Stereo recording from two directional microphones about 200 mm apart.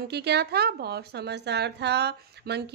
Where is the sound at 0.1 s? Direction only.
55° right (ahead or behind).